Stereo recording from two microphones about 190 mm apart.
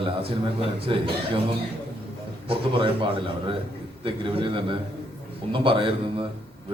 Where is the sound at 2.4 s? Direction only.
30° right (ahead or behind).